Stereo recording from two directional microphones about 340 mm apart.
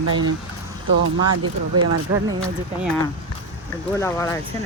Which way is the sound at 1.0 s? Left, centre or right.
Right.